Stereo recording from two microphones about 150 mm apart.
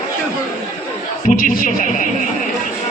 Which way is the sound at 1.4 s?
60° left (ahead or behind).